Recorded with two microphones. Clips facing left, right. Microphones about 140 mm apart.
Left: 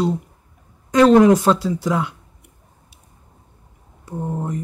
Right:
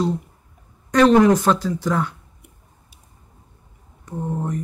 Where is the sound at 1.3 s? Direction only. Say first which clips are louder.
Left 2 dB; 25° left (ahead or behind).